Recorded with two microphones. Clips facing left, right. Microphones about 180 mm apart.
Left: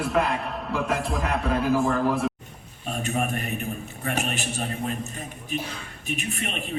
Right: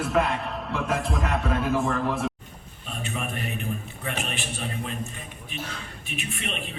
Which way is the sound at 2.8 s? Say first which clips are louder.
Left 6 dB; 45° left (ahead or behind).